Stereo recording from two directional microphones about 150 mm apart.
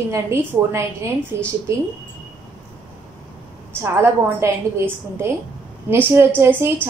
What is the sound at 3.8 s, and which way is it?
A woman's voice, 20° right (ahead or behind).